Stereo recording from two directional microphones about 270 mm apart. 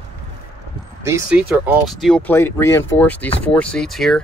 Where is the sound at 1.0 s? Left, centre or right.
Centre.